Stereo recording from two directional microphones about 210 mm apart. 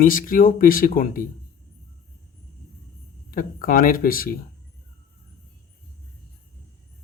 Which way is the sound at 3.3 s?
40° left (ahead or behind).